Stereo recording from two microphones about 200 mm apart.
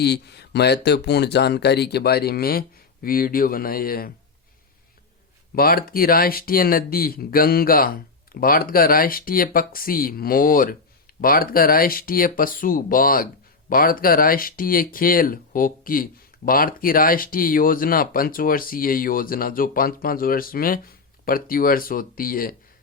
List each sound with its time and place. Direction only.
0.0 s speech: 55° left (ahead or behind)
5.5 s speech: 50° left (ahead or behind)